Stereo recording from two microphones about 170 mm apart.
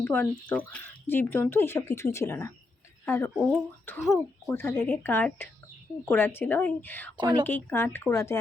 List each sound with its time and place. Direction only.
0.0 s speech: 10° left (ahead or behind)
3.3 s speech: 5° right (ahead or behind)
3.8 s speech: 10° left (ahead or behind)
7.2 s a woman's voice: 25° right (ahead or behind)
7.4 s speech: 10° left (ahead or behind)